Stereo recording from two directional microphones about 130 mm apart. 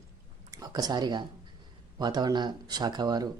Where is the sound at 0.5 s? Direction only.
30° right (ahead or behind).